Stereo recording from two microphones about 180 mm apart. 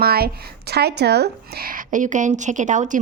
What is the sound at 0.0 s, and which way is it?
A woman's voice, 60° right (ahead or behind).